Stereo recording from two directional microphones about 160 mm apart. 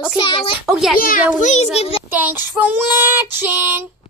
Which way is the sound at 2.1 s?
10° right (ahead or behind).